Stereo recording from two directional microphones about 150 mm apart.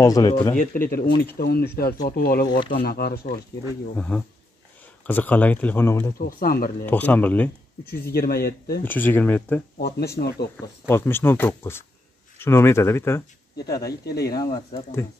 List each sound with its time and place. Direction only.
0.0 s a man's voice: 25° left (ahead or behind)
0.6 s speech: 75° left (ahead or behind)
1.1 s speech: 90° left
2.4 s a man's voice: 30° left (ahead or behind)
2.7 s speech: 90° left
3.9 s speech: 10° left (ahead or behind)
6.1 s speech: 75° left (ahead or behind)
6.9 s speech: 10° left (ahead or behind)
8.1 s speech: 90° left
8.8 s speech: 10° left (ahead or behind)
9.9 s speech: 90° left
10.9 s speech: 15° left (ahead or behind)
14.0 s speech: 90° left